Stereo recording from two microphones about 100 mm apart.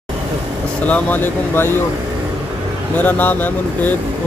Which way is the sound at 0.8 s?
15° left (ahead or behind).